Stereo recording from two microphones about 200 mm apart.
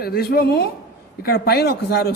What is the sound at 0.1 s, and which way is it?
Speech, 50° left (ahead or behind).